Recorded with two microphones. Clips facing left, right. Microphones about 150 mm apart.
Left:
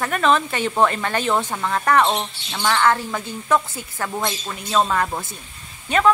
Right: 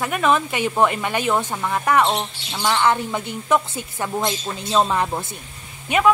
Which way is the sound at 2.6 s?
15° right (ahead or behind).